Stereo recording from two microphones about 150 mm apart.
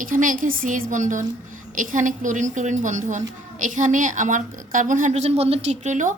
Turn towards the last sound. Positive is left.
turn(degrees=-55)  # may be behind; listen again after turning